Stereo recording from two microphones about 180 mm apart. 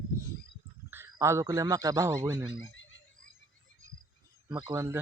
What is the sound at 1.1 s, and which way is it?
Speech, 15° right (ahead or behind).